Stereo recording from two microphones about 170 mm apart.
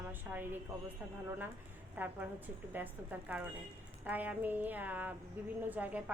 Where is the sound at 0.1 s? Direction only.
10° right (ahead or behind).